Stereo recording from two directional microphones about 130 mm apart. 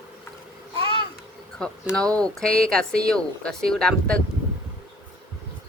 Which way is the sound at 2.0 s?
5° left (ahead or behind).